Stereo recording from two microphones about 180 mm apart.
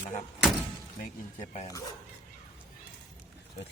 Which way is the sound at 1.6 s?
20° left (ahead or behind).